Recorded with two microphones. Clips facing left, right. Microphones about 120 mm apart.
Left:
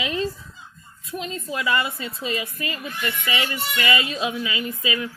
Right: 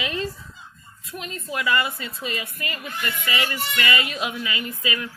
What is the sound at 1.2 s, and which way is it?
A woman's voice, 25° left (ahead or behind).